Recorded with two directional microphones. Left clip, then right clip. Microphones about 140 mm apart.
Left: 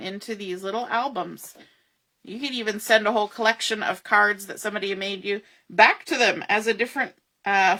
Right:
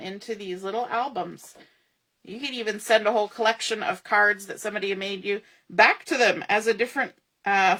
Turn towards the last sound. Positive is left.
turn(degrees=15)  # may be behind; listen again after turning